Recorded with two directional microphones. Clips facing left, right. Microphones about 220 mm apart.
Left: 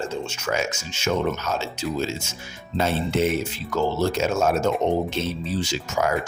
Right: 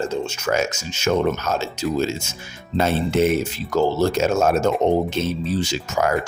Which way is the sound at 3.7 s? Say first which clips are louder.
Right 4 dB; 45° right (ahead or behind).